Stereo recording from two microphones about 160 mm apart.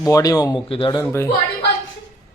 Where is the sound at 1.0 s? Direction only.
15° left (ahead or behind).